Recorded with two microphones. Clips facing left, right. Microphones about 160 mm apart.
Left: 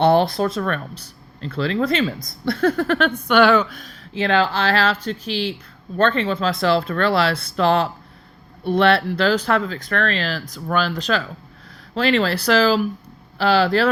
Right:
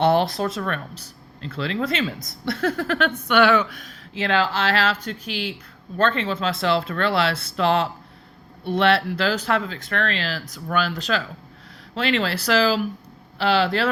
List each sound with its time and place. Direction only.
0.0 s speech: 30° left (ahead or behind)
3.2 s speech: 35° left (ahead or behind)